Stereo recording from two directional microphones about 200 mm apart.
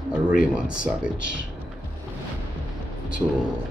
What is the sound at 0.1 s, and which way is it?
Speech, 5° right (ahead or behind).